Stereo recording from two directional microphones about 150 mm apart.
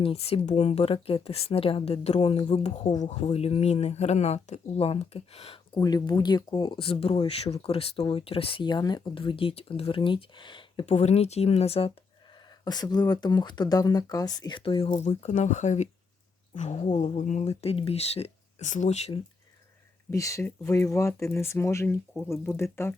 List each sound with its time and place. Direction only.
0.0 s speech: 40° left (ahead or behind)
5.8 s speech: 25° left (ahead or behind)
10.8 s speech: 45° left (ahead or behind)
12.6 s speech: 25° left (ahead or behind)
14.8 s speech: 50° left (ahead or behind)
20.1 s speech: 20° left (ahead or behind)